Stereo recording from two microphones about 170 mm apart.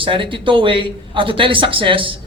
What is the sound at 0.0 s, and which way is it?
A man's voice, 30° right (ahead or behind).